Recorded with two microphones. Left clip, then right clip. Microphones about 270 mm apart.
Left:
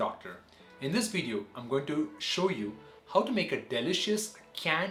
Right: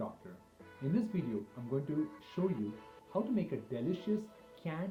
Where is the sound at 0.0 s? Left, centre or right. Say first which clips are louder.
Left 11 dB; centre.